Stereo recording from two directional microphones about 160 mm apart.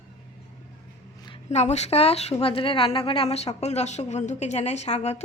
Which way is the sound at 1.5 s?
45° left (ahead or behind).